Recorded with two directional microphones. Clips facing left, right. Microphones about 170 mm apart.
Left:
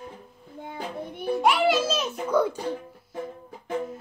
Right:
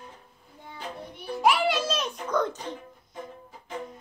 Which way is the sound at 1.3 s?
Centre (ahead or behind).